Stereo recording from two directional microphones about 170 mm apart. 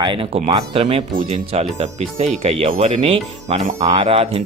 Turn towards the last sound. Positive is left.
turn(degrees=-35)  # may be behind; listen again after turning